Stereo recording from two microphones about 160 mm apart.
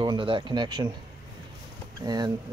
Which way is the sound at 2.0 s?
25° right (ahead or behind).